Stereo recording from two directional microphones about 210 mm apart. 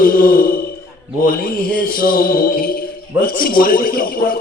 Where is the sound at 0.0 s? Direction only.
45° left (ahead or behind).